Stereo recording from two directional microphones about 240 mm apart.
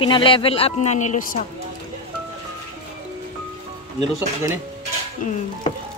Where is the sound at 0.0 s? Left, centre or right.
Left.